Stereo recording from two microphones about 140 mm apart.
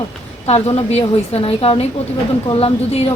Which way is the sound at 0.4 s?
45° left (ahead or behind).